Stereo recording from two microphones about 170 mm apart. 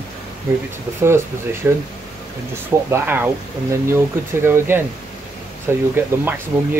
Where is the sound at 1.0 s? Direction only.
15° right (ahead or behind).